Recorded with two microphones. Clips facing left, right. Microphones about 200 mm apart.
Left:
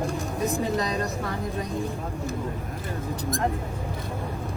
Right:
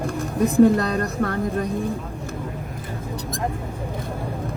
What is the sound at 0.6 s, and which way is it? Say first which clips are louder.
Speech: right 8 dB; 60° right (ahead or behind).